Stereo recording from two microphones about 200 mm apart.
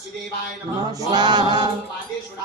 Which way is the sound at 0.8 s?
20° right (ahead or behind).